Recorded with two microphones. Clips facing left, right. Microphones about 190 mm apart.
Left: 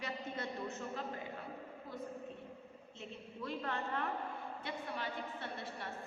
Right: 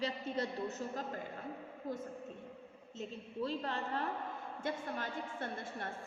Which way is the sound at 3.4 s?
30° right (ahead or behind).